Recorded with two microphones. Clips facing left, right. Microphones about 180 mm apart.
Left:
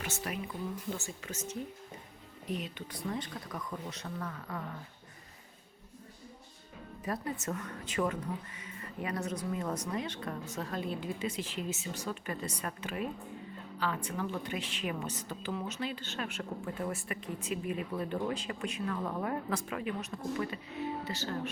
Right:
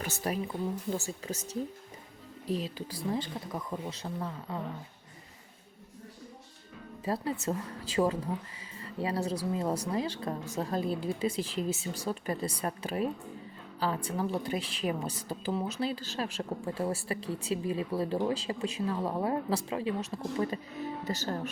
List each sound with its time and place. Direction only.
0.0 s a woman's voice: 35° right (ahead or behind)
2.5 s speech: 35° right (ahead or behind)
7.0 s a woman's voice: 30° right (ahead or behind)